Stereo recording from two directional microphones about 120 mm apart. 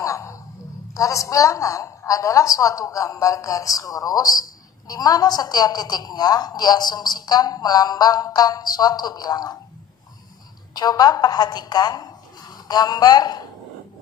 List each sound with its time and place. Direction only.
0.0 s a sound: 25° left (ahead or behind)
0.9 s a woman's voice: 25° left (ahead or behind)
10.7 s a woman's voice: 35° left (ahead or behind)